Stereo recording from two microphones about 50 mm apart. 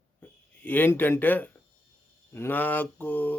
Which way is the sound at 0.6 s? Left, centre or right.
Left.